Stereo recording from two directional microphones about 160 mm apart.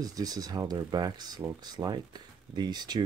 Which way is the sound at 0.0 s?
25° right (ahead or behind).